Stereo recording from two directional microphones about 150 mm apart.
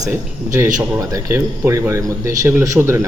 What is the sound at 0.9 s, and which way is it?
A man's voice, 25° right (ahead or behind).